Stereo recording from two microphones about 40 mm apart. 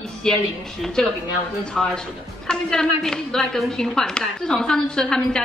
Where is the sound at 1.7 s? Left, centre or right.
Left.